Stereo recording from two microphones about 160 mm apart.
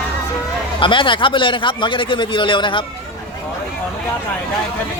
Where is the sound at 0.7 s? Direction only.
30° left (ahead or behind).